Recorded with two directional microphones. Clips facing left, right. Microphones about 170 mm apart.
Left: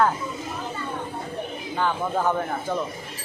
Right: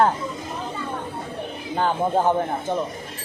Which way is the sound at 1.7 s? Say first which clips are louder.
Right 4 dB; 35° right (ahead or behind).